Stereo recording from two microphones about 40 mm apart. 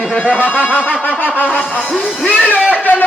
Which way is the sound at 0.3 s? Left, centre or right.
Left.